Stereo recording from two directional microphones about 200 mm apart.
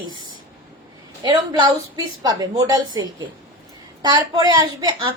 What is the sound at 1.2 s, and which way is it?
A woman's voice, 25° right (ahead or behind).